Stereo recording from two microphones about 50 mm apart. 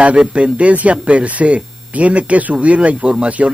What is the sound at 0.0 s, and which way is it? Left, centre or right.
Speech, right.